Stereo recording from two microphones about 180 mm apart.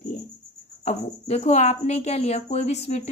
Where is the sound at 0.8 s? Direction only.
35° left (ahead or behind).